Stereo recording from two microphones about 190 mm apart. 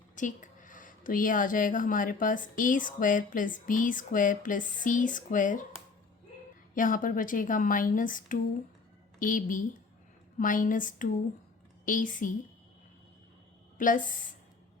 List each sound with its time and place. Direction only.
0.2 s speech: 40° left (ahead or behind)
6.7 s speech: 45° left (ahead or behind)
13.7 s a woman's voice: 45° left (ahead or behind)